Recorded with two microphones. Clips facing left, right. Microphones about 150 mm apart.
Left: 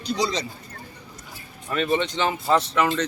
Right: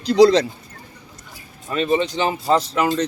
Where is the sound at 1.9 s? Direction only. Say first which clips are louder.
Right 4 dB; 35° right (ahead or behind).